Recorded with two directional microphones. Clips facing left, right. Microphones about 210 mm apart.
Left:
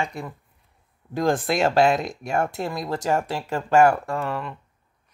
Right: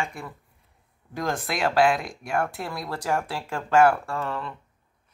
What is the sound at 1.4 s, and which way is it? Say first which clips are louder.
Speech: even; 25° left (ahead or behind).